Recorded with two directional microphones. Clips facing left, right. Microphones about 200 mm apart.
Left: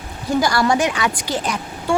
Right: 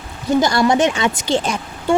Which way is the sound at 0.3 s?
20° right (ahead or behind).